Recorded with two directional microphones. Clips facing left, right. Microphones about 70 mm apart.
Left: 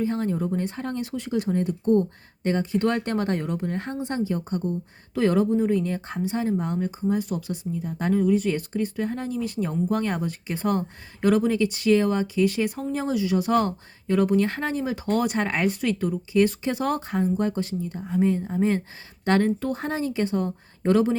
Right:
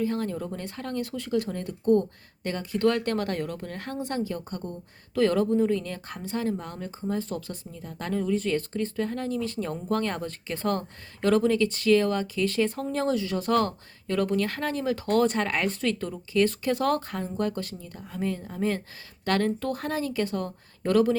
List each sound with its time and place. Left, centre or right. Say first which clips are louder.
0.0 s speech: left 3 dB; left